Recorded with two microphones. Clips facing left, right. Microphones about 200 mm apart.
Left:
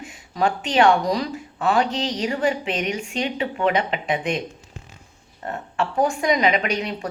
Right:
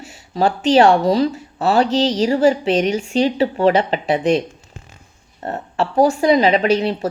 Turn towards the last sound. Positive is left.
turn(degrees=-30)  # may be behind; listen again after turning